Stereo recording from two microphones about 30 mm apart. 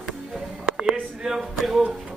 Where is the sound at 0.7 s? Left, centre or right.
Right.